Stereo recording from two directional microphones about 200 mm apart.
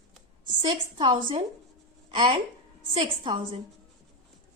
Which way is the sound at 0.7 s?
25° right (ahead or behind).